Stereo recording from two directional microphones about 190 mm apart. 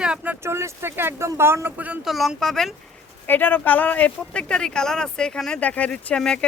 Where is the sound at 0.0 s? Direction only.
5° right (ahead or behind).